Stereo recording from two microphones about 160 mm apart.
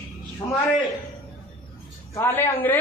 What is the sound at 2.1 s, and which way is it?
Speech, 15° left (ahead or behind).